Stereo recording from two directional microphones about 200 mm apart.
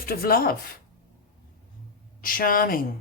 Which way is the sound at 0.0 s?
50° left (ahead or behind).